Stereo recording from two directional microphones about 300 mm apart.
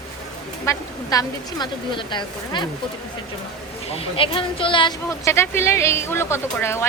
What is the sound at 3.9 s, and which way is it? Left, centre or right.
A woman's voice, centre.